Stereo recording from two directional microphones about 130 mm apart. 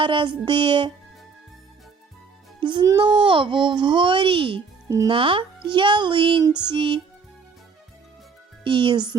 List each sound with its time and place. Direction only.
0.0 s a child's voice: 40° right (ahead or behind)
2.6 s music: 40° right (ahead or behind)
2.8 s a child's voice: 35° right (ahead or behind)
8.6 s a child's voice: 40° right (ahead or behind)